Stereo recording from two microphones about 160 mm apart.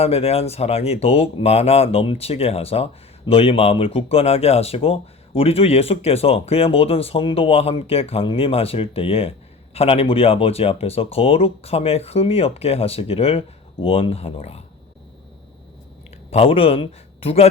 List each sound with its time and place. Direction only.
0.0 s speech: 40° left (ahead or behind)
16.3 s a man's voice: 35° left (ahead or behind)